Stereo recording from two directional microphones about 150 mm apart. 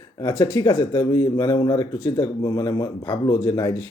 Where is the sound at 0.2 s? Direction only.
30° left (ahead or behind).